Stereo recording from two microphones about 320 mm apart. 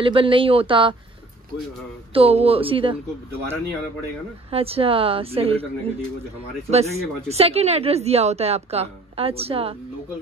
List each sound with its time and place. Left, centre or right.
0.0 s speech: centre
2.1 s speech: centre
4.5 s speech: centre